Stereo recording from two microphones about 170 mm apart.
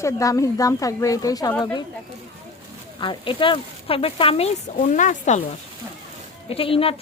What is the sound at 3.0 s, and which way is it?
Speech, 30° left (ahead or behind).